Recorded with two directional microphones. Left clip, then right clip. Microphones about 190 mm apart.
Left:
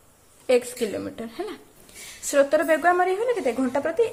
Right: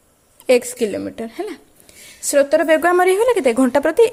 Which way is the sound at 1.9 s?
30° right (ahead or behind).